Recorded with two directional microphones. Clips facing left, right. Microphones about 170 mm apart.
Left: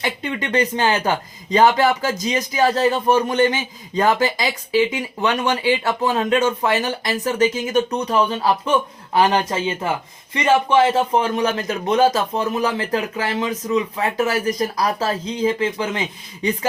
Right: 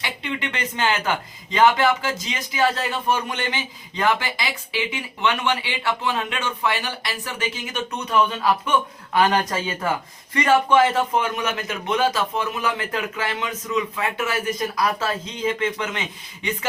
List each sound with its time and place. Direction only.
0.0 s speech: 45° left (ahead or behind)